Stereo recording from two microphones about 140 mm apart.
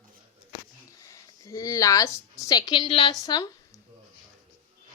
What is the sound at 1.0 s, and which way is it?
A woman's voice, 25° left (ahead or behind).